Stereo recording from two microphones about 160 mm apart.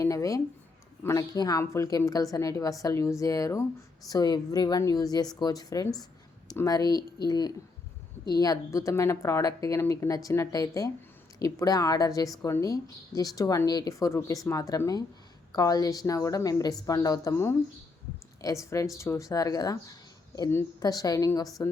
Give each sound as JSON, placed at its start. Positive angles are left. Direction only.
{"t": 0.0, "sound": "speech", "side_deg": 20}